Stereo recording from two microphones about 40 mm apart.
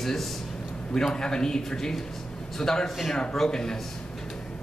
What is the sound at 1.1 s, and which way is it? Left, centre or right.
Speech, centre.